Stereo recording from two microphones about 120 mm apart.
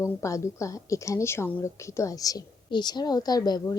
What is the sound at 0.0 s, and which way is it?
A woman's voice, 25° left (ahead or behind).